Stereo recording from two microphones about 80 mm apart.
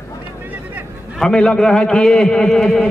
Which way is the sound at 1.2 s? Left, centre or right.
Centre.